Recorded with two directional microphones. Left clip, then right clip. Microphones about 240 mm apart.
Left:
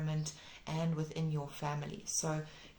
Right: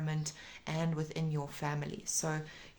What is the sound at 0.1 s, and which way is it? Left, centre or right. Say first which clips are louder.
Speech: right 2 dB; right.